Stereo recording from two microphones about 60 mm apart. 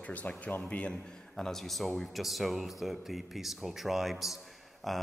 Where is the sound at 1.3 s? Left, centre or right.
Centre.